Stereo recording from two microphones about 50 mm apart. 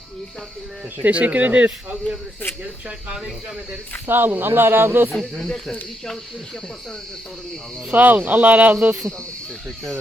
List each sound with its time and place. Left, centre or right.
0.9 s speech: right
3.1 s speech: centre
4.0 s speech: right
5.1 s speech: centre
7.9 s speech: right
9.6 s speech: centre